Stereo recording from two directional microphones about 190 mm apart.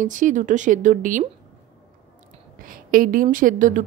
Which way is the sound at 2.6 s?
50° right (ahead or behind).